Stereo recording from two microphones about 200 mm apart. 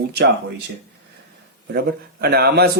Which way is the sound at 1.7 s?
50° right (ahead or behind).